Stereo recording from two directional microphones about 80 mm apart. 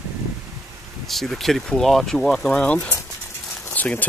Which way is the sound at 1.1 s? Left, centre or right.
Centre.